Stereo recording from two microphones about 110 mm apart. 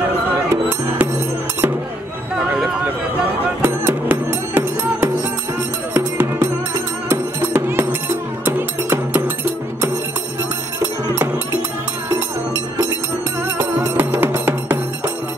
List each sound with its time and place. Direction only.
0.5 s speech: 20° right (ahead or behind)
3.6 s music: 20° right (ahead or behind)
13.9 s music: 20° right (ahead or behind)